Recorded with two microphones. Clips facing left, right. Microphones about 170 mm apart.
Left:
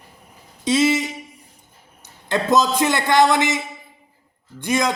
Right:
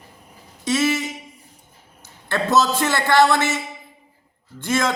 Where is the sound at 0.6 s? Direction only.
20° left (ahead or behind).